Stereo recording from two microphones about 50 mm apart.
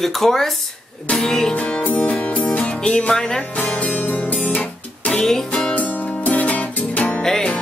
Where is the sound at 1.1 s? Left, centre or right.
Centre.